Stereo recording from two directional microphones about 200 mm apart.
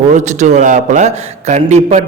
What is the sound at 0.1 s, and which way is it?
A man's voice, 35° right (ahead or behind).